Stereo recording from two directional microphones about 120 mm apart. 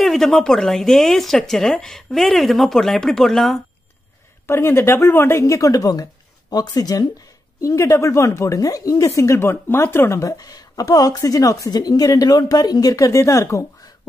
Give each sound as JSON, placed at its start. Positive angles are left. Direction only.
{"t": 0.0, "sound": "a woman's voice", "side_deg": 5}
{"t": 4.5, "sound": "speech", "side_deg": 20}